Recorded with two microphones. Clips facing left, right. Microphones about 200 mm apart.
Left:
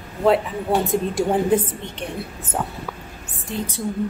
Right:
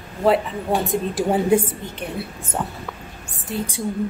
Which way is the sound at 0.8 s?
Centre (ahead or behind).